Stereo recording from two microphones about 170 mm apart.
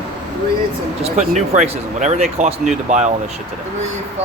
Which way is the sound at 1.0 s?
40° right (ahead or behind).